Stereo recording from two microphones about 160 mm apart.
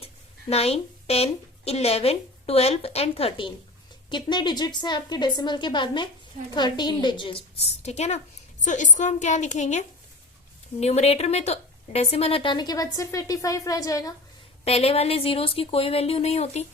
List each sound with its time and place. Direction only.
0.5 s a woman's voice: 40° left (ahead or behind)
7.8 s a woman's voice: 45° left (ahead or behind); by 14.1 s 20° left (ahead or behind)
14.6 s speech: 40° left (ahead or behind)